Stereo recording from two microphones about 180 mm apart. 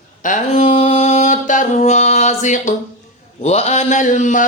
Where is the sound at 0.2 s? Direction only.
45° left (ahead or behind).